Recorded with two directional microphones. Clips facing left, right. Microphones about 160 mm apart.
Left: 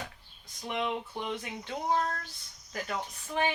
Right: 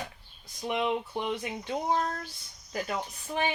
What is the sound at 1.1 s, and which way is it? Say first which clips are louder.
Speech: right 4 dB; 20° right (ahead or behind).